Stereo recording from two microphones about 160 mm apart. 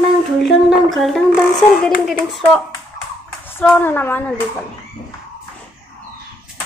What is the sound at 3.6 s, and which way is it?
Speech, 10° left (ahead or behind).